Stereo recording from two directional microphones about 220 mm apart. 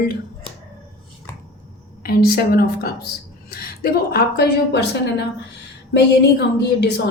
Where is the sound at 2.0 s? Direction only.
45° left (ahead or behind).